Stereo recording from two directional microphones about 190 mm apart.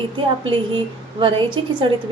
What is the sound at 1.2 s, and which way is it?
Speech, 25° right (ahead or behind).